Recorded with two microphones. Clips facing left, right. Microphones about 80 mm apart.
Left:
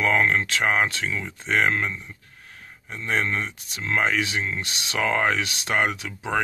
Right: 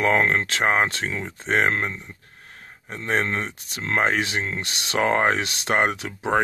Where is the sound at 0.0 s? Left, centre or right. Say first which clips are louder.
Right 1 dB; right.